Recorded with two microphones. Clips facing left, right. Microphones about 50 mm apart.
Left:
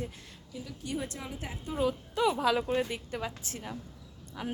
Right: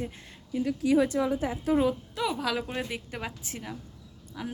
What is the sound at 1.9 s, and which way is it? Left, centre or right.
Speech, centre.